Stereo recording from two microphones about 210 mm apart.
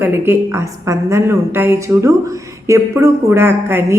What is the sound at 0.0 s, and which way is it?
A man's voice, 10° right (ahead or behind).